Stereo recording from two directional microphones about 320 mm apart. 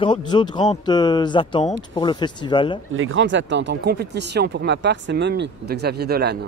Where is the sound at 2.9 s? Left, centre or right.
Right.